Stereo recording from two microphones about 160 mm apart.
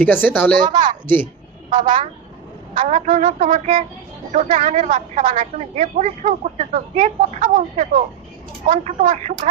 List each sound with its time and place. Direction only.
0.0 s a woman's voice: 10° left (ahead or behind)
0.6 s a woman's voice: 30° right (ahead or behind)
1.0 s a woman's voice: 15° left (ahead or behind)
2.7 s a woman's voice: 50° right (ahead or behind)